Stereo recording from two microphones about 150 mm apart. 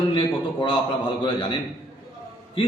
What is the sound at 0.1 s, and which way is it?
A man's voice, 35° left (ahead or behind).